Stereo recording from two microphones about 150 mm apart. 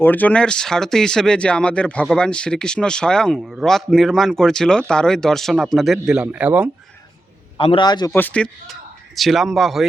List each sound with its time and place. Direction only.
0.0 s speech: 10° left (ahead or behind); by 6.7 s 10° right (ahead or behind)
7.6 s a man's voice: 40° left (ahead or behind)
7.9 s speech: 25° left (ahead or behind)
8.1 s speech: 10° left (ahead or behind)